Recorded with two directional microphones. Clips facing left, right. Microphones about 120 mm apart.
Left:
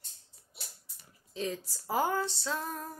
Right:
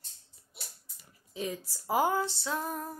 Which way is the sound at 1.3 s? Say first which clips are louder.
Even; 10° right (ahead or behind).